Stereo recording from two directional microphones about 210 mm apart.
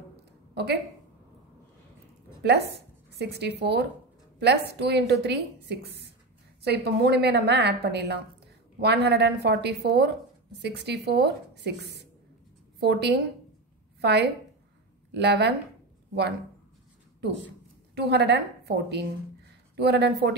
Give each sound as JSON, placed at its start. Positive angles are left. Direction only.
{"t": 2.4, "sound": "a woman's voice", "side_deg": -50}
{"t": 17.9, "sound": "a woman's voice", "side_deg": -50}